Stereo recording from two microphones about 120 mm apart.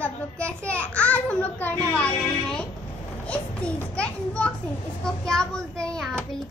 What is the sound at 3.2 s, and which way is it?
Children playing, 10° left (ahead or behind).